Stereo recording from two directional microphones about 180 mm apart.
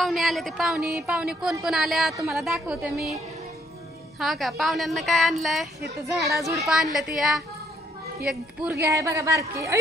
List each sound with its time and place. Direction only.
0.0 s speech: centre (ahead or behind)
4.2 s speech: centre (ahead or behind)
8.8 s a woman's voice: 15° right (ahead or behind)